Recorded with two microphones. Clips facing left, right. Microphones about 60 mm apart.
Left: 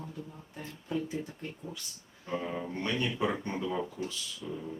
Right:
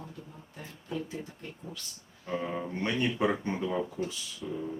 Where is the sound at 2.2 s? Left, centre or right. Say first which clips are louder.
Right 2 dB; centre.